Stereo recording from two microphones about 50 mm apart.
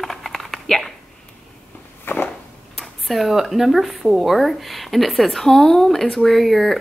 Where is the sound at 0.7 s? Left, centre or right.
Centre.